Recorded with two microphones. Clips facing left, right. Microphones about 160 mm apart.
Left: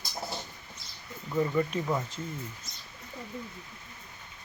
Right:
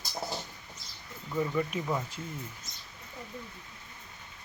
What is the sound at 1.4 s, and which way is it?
Speech, centre (ahead or behind).